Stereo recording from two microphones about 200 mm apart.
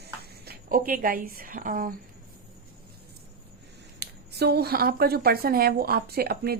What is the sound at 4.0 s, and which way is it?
A woman's voice, 55° right (ahead or behind).